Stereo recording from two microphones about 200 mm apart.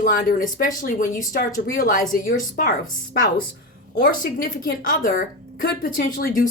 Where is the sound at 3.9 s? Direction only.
45° left (ahead or behind).